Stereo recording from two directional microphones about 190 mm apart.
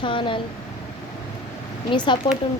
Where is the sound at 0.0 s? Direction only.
25° left (ahead or behind).